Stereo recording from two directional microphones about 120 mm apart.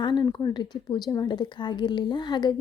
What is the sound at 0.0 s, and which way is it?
Speech, 35° left (ahead or behind).